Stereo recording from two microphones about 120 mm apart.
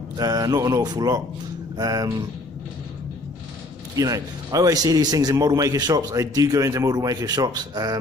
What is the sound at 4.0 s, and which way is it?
A man's voice, 30° right (ahead or behind).